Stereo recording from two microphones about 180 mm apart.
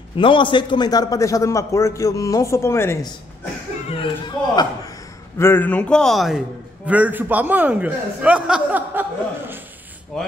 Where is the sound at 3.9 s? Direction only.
25° left (ahead or behind).